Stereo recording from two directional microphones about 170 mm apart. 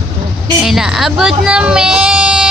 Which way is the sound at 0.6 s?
Centre (ahead or behind).